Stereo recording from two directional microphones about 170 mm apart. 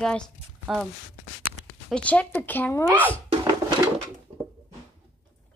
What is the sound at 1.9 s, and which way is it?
Speech, 5° left (ahead or behind).